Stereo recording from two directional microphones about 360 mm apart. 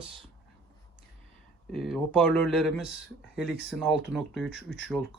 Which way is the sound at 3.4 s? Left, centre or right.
Centre.